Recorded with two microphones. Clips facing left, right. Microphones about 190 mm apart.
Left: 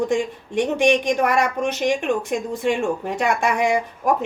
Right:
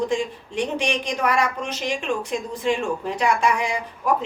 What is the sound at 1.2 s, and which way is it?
A woman's voice, 55° left (ahead or behind).